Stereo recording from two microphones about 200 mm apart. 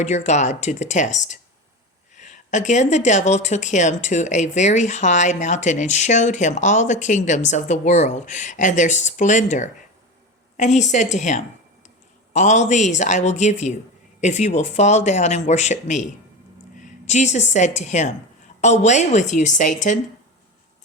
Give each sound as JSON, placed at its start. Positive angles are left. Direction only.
{"t": 0.3, "sound": "a woman's voice", "side_deg": 35}